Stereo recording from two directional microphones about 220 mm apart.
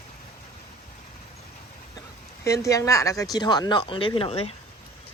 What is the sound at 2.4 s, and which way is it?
Speech, 15° left (ahead or behind).